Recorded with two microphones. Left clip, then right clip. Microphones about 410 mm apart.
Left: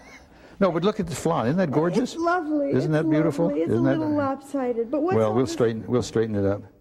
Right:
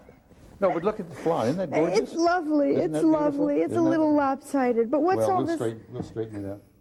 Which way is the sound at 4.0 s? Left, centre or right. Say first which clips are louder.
Right 2 dB; centre.